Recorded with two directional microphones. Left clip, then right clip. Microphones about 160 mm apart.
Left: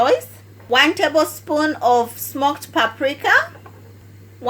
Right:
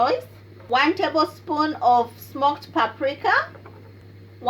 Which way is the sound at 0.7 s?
45° left (ahead or behind).